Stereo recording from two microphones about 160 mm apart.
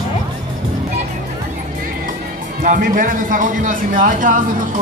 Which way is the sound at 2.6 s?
55° right (ahead or behind).